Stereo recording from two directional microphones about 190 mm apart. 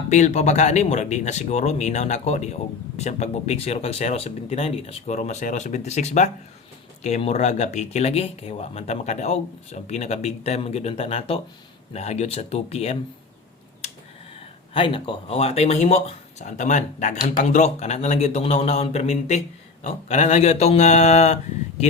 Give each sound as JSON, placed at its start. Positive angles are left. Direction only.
{"t": 0.1, "sound": "speech", "side_deg": 40}
{"t": 14.7, "sound": "speech", "side_deg": 25}